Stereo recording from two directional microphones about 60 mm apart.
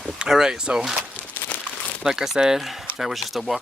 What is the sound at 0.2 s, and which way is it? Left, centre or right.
Speech, centre.